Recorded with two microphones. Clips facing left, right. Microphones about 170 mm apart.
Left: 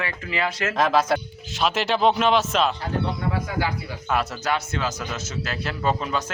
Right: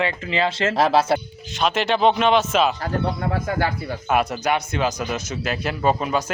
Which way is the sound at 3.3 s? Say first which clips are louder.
Right 3 dB; 50° right (ahead or behind).